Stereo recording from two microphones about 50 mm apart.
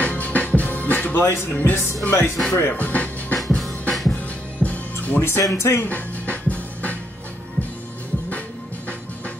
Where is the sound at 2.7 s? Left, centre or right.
Left.